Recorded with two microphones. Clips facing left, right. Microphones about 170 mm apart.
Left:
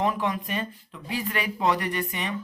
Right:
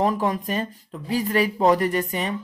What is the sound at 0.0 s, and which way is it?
Speech, 40° right (ahead or behind).